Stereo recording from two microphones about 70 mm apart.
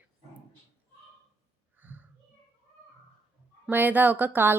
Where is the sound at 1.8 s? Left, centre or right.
Right.